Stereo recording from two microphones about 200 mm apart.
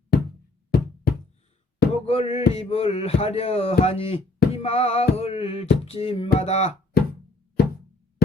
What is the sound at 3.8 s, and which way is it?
Speech, 30° left (ahead or behind).